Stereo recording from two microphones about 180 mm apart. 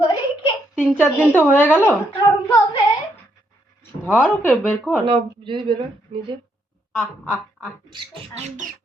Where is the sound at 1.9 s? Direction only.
20° left (ahead or behind).